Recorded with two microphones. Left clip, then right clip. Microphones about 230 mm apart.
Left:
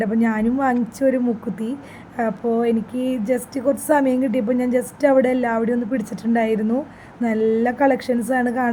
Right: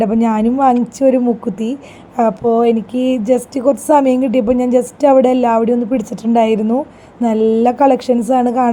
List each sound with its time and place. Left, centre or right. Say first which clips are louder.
0.0 s a woman's voice: right 7 dB; centre